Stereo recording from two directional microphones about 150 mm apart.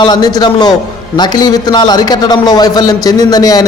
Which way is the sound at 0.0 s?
25° left (ahead or behind).